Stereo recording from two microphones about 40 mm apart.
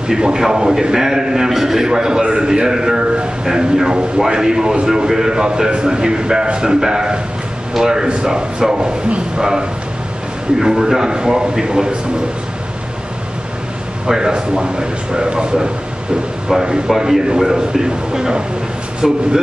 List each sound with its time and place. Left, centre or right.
0.1 s a man's voice: centre
14.0 s a man's voice: centre
19.0 s a man's voice: centre